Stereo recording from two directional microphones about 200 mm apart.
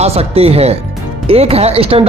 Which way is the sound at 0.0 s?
30° right (ahead or behind).